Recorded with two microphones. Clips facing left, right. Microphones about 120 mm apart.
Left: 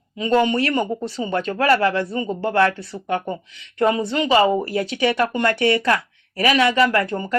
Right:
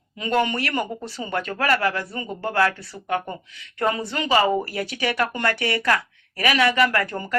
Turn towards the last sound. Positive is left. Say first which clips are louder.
# left 4 dB
turn(degrees=20)  # may be behind; listen again after turning